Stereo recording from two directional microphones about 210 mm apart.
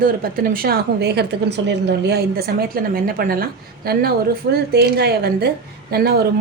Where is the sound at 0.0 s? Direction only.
45° right (ahead or behind).